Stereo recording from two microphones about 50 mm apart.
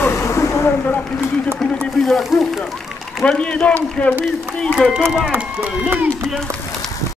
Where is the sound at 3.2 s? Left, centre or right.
Centre.